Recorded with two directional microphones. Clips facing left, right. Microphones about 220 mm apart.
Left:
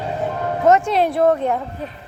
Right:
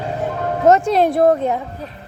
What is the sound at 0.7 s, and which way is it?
Music, 40° right (ahead or behind).